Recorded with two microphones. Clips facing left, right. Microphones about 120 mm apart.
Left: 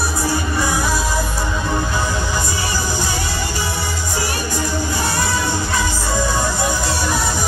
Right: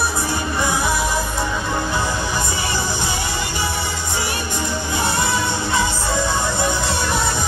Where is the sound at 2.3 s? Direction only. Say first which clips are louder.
Even; 20° right (ahead or behind).